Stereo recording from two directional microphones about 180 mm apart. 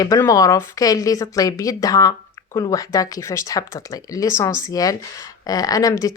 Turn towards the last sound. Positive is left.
turn(degrees=20)  # may be behind; listen again after turning